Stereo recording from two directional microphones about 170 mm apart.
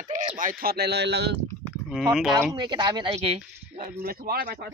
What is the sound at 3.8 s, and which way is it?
Speech, 60° right (ahead or behind).